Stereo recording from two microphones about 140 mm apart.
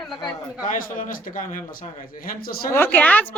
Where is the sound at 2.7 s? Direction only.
15° left (ahead or behind).